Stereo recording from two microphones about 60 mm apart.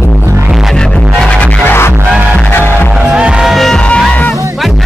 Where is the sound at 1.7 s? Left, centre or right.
Left.